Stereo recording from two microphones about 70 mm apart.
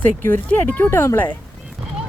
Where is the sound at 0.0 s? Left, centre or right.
Left.